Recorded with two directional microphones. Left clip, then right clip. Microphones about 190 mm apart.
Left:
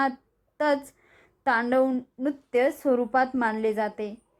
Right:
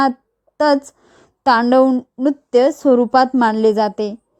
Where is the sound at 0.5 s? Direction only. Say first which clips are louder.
Right 10 dB; 45° right (ahead or behind).